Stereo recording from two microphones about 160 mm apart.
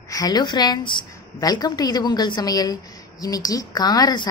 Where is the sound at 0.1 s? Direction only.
25° left (ahead or behind).